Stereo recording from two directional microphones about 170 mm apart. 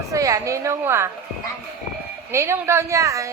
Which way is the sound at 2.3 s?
15° right (ahead or behind).